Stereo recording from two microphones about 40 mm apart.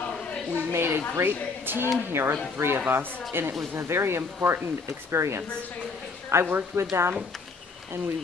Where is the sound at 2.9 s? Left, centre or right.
Right.